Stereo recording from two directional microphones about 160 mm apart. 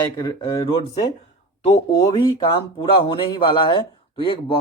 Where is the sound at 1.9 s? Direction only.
25° left (ahead or behind).